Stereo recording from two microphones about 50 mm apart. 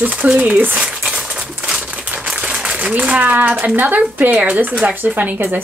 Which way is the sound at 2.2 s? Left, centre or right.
Right.